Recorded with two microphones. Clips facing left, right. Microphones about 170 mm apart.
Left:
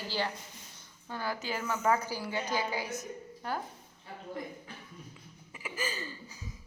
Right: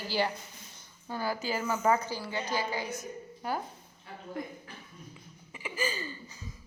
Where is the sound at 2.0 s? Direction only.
10° left (ahead or behind).